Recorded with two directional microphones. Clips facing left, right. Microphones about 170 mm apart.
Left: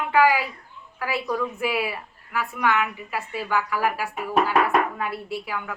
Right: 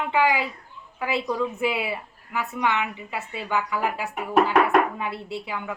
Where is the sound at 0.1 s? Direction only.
20° right (ahead or behind).